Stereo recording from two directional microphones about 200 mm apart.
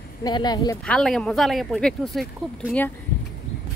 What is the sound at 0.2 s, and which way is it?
Speech, 20° left (ahead or behind).